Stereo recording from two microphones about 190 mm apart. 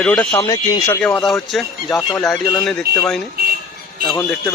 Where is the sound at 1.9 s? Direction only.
15° left (ahead or behind).